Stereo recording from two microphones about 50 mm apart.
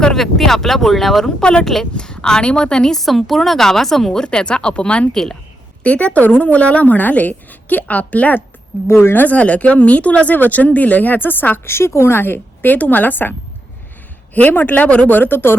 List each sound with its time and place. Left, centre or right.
0.0 s speech: centre
1.4 s a woman's voice: centre
1.6 s speech: centre
3.0 s speech: centre; by 5.0 s left
5.1 s speech: centre
5.8 s a woman's voice: left
8.9 s speech: left
9.1 s speech: left
14.5 s speech: left
15.1 s speech: left